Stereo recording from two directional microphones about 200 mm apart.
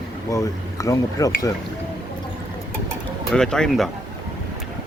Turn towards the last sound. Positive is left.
turn(degrees=0)  # may be behind; listen again after turning